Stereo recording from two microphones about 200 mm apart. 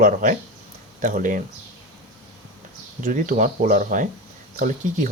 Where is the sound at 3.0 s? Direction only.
40° right (ahead or behind).